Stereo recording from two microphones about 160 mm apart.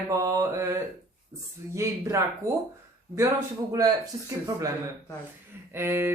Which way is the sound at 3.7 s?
25° right (ahead or behind).